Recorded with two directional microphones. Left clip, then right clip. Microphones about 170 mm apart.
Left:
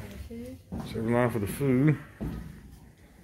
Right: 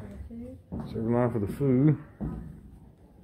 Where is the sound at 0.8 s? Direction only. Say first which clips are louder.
Left 1 dB; centre (ahead or behind).